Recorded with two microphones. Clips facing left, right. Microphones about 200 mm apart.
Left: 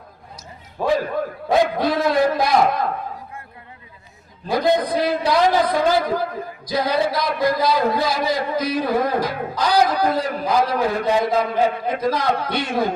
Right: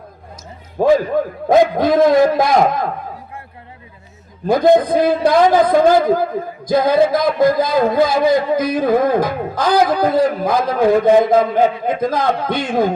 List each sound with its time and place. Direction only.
0.8 s a man's voice: 45° right (ahead or behind)
4.4 s a man's voice: 50° right (ahead or behind)